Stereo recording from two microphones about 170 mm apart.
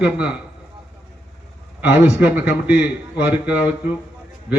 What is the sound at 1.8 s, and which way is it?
Speech, 10° right (ahead or behind).